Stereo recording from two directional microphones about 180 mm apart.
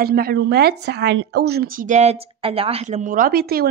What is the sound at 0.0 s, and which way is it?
Speech, 60° right (ahead or behind).